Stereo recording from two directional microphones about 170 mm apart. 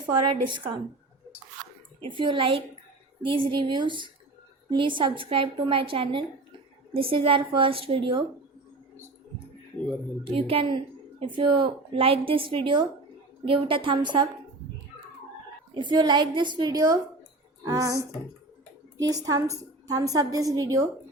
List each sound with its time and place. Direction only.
0.0 s a woman's voice: 30° right (ahead or behind)
2.0 s a woman's voice: 30° right (ahead or behind)
10.2 s a woman's voice: 35° right (ahead or behind)
15.7 s a woman's voice: 25° right (ahead or behind)